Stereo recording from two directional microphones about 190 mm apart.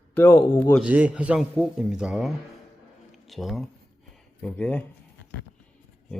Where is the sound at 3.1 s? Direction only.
Centre (ahead or behind).